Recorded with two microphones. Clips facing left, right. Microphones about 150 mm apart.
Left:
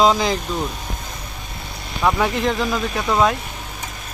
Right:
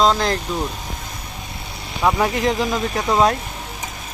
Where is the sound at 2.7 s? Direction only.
20° right (ahead or behind).